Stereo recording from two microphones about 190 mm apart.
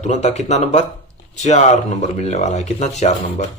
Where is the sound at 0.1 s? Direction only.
35° left (ahead or behind).